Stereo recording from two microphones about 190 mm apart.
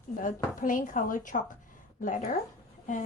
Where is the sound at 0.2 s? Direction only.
45° left (ahead or behind).